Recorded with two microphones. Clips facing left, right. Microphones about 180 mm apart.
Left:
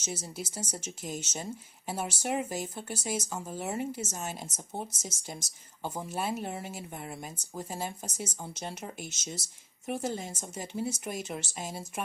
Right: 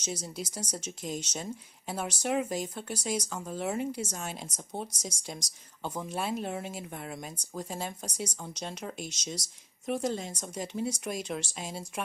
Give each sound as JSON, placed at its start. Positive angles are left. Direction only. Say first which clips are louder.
{"t": 0.0, "sound": "speech", "louder": "right 1 dB", "side_deg": 5}
{"t": 4.5, "sound": "speech", "louder": "right 1 dB", "side_deg": 25}
{"t": 5.0, "sound": "speech", "louder": "right 2 dB", "side_deg": 5}
{"t": 5.4, "sound": "speech", "louder": "even", "side_deg": 25}
{"t": 5.9, "sound": "speech", "louder": "right 1 dB", "side_deg": 5}